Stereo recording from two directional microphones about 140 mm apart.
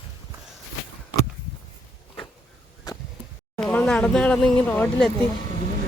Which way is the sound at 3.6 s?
10° left (ahead or behind).